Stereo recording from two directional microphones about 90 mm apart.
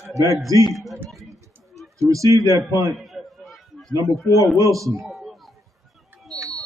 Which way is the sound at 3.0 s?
Centre (ahead or behind).